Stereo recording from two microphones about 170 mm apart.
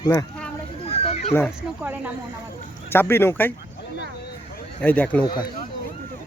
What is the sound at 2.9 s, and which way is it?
Speech, 15° left (ahead or behind).